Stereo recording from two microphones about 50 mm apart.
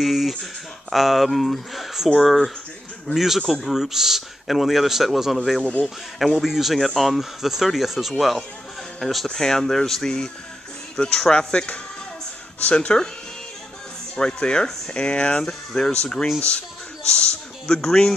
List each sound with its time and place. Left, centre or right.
0.0 s speech: centre; by 13.1 s left
14.1 s speech: centre